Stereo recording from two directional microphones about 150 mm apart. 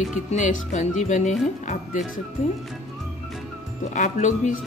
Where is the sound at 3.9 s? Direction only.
55° left (ahead or behind).